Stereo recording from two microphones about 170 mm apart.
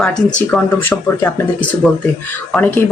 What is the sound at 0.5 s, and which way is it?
Speech, 10° left (ahead or behind).